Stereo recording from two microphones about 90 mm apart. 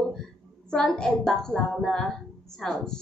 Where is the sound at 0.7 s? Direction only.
10° left (ahead or behind).